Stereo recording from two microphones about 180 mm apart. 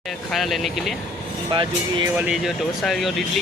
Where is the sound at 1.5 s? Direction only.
25° right (ahead or behind).